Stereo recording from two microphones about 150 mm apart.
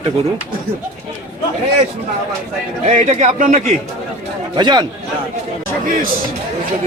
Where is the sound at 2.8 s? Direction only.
50° right (ahead or behind).